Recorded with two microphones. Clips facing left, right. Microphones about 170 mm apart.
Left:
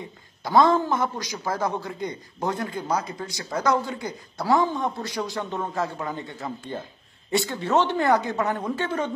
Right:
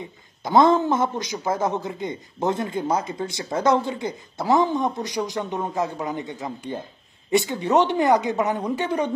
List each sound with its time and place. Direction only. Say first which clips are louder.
0.4 s a man's voice: right 2 dB; 20° right (ahead or behind)